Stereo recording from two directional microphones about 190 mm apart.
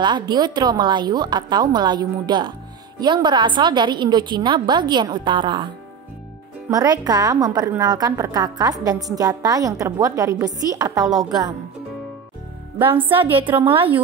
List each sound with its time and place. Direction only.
0.0 s a woman's voice: 25° right (ahead or behind)
6.7 s a woman's voice: 20° right (ahead or behind)
12.9 s a woman's voice: 25° right (ahead or behind)